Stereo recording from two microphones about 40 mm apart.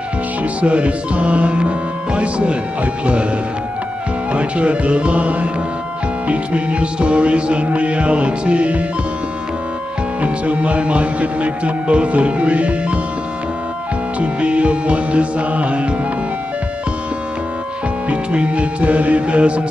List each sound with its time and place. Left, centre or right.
0.4 s music: right
4.3 s music: right
10.2 s music: right
14.2 s music: right
18.1 s music: right